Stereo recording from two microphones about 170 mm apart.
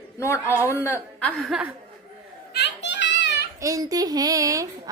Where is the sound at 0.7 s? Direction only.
15° left (ahead or behind).